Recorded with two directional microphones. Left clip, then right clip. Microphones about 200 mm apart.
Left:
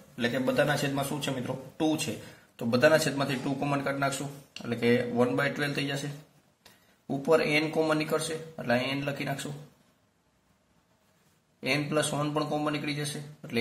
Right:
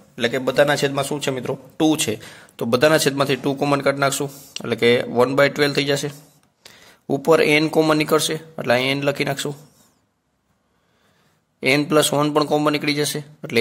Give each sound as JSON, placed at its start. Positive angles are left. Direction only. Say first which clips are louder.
{"t": 0.1, "sound": "a man's voice", "louder": "right 8 dB", "side_deg": -45}
{"t": 2.5, "sound": "a man's voice", "louder": "right 7 dB", "side_deg": -45}
{"t": 11.6, "sound": "a man's voice", "louder": "right 12 dB", "side_deg": -50}